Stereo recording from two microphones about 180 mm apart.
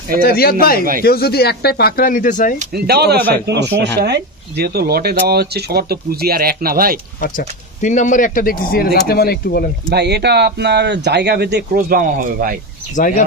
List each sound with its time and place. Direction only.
0.2 s speech: 55° left (ahead or behind)
2.6 s speech: 60° right (ahead or behind)
7.2 s speech: 50° left (ahead or behind)
9.8 s speech: 65° right (ahead or behind)